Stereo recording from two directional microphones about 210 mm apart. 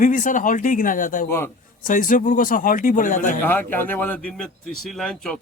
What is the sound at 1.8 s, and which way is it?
Speech, 40° left (ahead or behind).